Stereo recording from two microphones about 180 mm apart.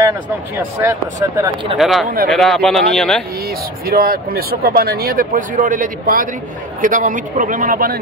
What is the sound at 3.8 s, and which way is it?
A man's voice, 55° right (ahead or behind).